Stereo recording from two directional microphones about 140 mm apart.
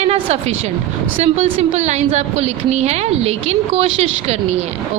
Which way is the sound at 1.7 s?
55° right (ahead or behind).